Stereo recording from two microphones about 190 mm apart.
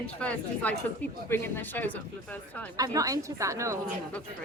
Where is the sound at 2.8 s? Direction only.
20° right (ahead or behind).